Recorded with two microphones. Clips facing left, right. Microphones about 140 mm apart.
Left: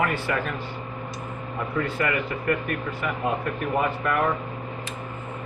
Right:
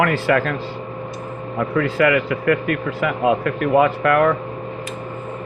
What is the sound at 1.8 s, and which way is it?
Speech, 90° right.